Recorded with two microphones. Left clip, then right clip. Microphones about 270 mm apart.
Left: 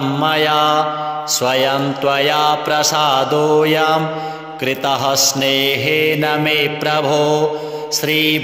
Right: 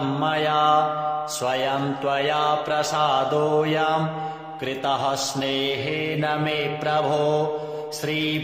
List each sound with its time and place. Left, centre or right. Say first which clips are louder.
0.2 s mantra: left 7 dB; left